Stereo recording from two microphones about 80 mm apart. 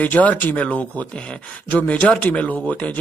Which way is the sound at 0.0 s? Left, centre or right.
Centre.